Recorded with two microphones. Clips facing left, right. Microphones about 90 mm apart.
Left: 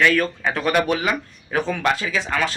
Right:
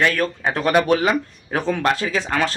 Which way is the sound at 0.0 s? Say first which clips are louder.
Left 1 dB; 35° right (ahead or behind).